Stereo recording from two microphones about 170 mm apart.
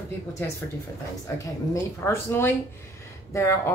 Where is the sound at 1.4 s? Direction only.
15° left (ahead or behind).